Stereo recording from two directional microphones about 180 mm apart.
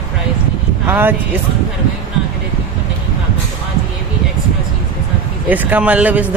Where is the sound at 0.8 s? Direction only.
10° right (ahead or behind).